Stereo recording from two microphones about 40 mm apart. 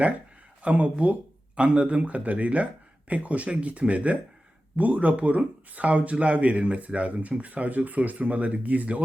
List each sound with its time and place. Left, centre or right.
0.6 s speech: right